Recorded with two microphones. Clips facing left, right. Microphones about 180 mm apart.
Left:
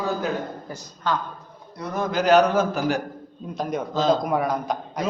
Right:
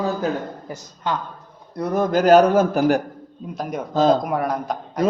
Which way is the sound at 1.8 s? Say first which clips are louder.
Right 6 dB; 50° right (ahead or behind).